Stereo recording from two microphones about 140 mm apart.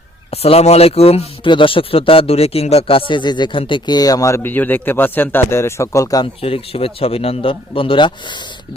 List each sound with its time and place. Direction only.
0.3 s a man's voice: 45° left (ahead or behind); by 6.2 s 25° left (ahead or behind)
6.4 s a man's voice: 40° left (ahead or behind)